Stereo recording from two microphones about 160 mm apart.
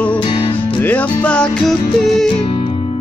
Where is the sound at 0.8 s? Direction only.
10° left (ahead or behind).